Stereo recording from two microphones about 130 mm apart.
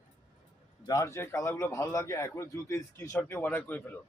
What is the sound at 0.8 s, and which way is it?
A man's voice, 25° left (ahead or behind).